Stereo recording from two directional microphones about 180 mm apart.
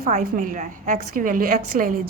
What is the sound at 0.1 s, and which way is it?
A woman's voice, 50° right (ahead or behind).